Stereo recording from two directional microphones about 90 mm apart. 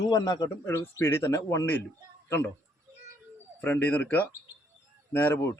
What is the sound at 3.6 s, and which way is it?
Speech, 20° left (ahead or behind).